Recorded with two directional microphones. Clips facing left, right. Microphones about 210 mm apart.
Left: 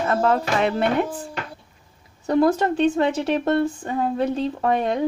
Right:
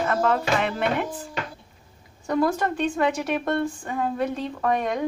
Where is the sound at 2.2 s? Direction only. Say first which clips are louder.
Left 5 dB; 25° left (ahead or behind).